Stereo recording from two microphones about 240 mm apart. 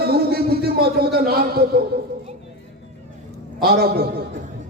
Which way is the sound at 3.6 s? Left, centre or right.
Right.